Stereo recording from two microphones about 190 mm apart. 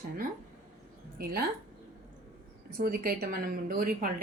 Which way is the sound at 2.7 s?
55° right (ahead or behind).